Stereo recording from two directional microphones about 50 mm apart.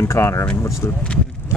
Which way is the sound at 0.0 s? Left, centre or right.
Left.